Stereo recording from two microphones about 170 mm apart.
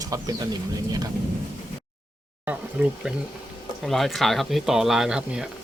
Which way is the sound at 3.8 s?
Centre (ahead or behind).